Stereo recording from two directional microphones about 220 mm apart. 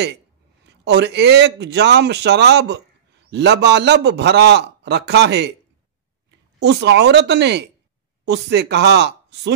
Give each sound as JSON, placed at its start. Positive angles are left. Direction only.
{"t": 0.8, "sound": "a man's voice", "side_deg": -50}
{"t": 6.6, "sound": "a man's voice", "side_deg": -50}